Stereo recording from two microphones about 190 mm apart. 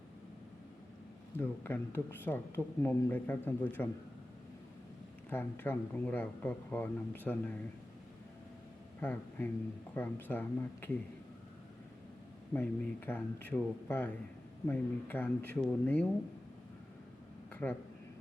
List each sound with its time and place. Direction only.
1.4 s speech: 10° left (ahead or behind)
5.3 s speech: 10° left (ahead or behind)
9.0 s a man's voice: 10° left (ahead or behind)
12.5 s speech: 10° left (ahead or behind)
17.5 s a sound: 5° left (ahead or behind)